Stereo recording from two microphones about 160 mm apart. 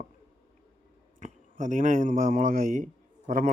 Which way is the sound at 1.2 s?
50° right (ahead or behind).